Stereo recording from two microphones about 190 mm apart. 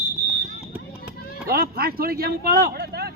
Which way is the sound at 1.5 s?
50° right (ahead or behind).